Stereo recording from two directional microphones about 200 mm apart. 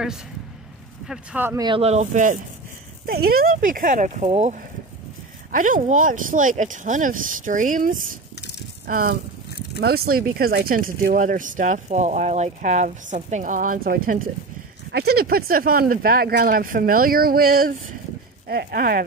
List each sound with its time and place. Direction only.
1.0 s speech: 5° right (ahead or behind)
1.6 s speech: 25° right (ahead or behind)
3.1 s speech: 50° right (ahead or behind)